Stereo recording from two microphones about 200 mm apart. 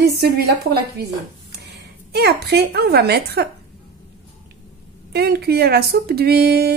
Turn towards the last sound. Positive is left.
turn(degrees=-50)  # may be behind; listen again after turning